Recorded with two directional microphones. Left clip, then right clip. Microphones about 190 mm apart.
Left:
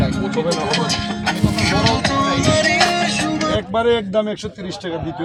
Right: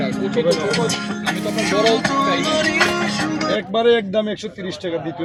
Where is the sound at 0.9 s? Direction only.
25° right (ahead or behind).